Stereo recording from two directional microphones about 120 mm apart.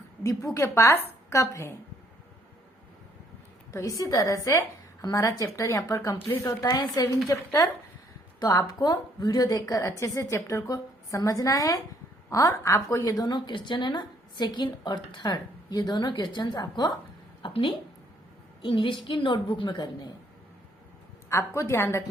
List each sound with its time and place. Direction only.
0.2 s a woman's voice: 25° left (ahead or behind)
3.7 s a woman's voice: 25° left (ahead or behind)
21.2 s a woman's voice: 25° left (ahead or behind)